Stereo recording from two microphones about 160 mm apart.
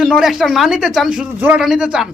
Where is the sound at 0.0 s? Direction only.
Centre (ahead or behind).